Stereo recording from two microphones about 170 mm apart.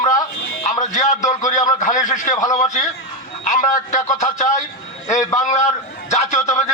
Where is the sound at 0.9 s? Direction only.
45° left (ahead or behind).